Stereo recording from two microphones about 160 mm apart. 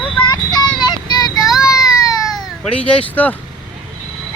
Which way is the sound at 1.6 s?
20° left (ahead or behind).